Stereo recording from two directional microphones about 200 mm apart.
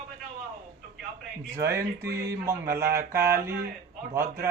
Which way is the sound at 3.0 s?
15° right (ahead or behind).